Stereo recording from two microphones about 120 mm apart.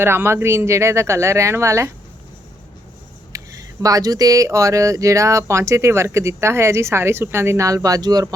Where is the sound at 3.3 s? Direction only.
30° right (ahead or behind).